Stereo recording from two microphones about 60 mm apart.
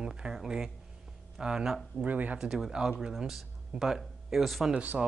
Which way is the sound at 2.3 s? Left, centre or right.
Centre.